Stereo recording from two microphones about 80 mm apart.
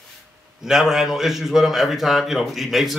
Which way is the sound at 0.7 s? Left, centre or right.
Centre.